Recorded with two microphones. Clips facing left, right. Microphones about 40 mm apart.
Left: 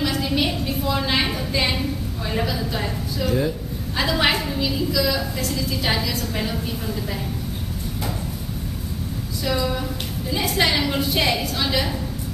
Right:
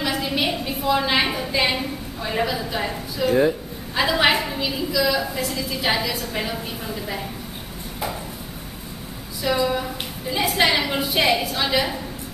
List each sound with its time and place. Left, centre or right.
0.0 s a woman's voice: centre
3.3 s speech: right
3.9 s a woman's voice: centre
9.4 s a woman's voice: centre